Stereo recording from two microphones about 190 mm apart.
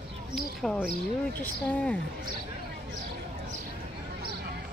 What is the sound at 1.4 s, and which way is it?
Speech, 5° left (ahead or behind).